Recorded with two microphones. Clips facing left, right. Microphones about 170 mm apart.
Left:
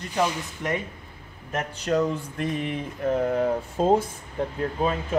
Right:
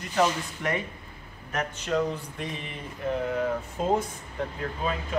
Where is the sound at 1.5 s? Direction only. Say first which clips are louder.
Left 3 dB; 40° left (ahead or behind).